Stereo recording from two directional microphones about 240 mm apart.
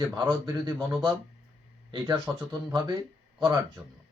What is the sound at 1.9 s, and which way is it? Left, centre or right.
Speech, right.